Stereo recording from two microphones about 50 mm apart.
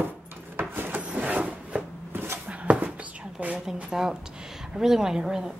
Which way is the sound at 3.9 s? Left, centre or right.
Centre.